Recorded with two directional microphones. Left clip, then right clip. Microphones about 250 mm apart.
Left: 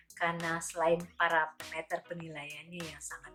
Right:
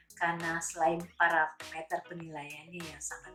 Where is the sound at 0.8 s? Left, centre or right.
Left.